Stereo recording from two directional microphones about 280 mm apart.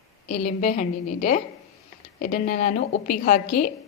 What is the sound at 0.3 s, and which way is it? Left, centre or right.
A woman's voice, left.